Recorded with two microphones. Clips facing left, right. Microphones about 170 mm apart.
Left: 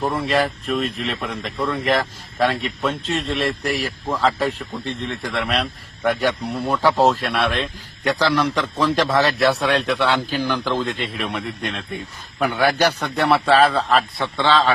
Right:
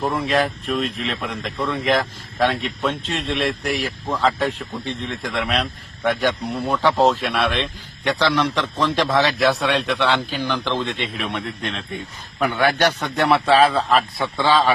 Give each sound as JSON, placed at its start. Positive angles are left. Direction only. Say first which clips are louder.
{"t": 0.0, "sound": "a man's voice", "louder": "even", "side_deg": 0}
{"t": 14.4, "sound": "a man's voice", "louder": "even", "side_deg": -15}